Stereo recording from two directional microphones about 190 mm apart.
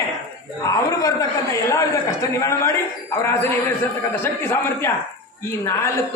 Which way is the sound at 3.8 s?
10° left (ahead or behind).